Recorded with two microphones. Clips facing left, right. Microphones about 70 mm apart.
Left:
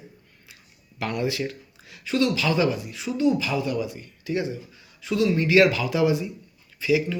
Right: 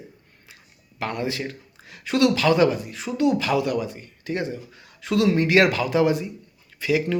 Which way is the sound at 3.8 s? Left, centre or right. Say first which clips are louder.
Right 1 dB; right.